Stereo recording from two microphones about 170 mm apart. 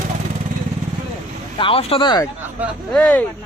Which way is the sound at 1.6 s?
35° left (ahead or behind).